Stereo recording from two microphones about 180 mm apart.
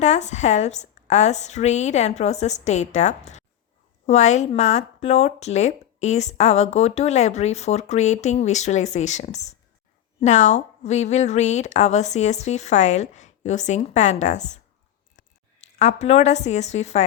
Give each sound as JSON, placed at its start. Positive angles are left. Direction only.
{"t": 0.0, "sound": "speech", "side_deg": 40}
{"t": 15.8, "sound": "speech", "side_deg": 35}